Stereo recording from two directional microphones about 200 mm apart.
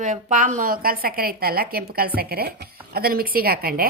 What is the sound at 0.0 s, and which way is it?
A woman's voice, 40° right (ahead or behind).